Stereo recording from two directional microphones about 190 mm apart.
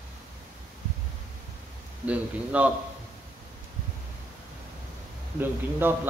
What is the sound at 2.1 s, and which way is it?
Speech, 5° right (ahead or behind).